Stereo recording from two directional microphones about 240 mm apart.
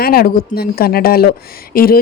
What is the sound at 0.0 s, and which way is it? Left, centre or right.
Speech, left.